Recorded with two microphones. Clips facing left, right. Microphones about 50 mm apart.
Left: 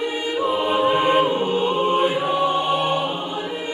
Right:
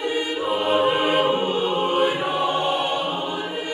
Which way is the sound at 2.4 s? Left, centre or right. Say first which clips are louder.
Left 2 dB; centre.